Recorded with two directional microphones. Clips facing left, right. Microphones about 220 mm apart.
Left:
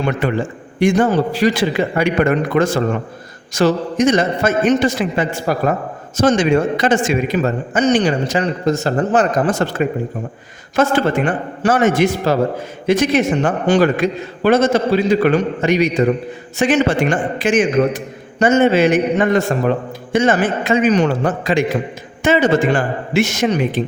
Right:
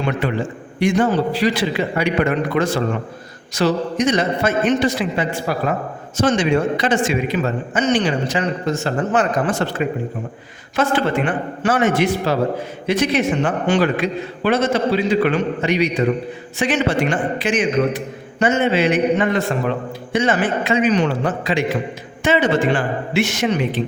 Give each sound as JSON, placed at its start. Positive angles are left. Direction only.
{"t": 0.2, "sound": "a man's voice", "side_deg": 45}